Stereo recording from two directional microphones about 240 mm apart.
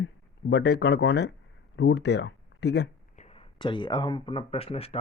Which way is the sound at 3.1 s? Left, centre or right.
Left.